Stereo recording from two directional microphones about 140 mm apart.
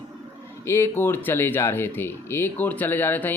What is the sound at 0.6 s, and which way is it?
Speech, 20° left (ahead or behind).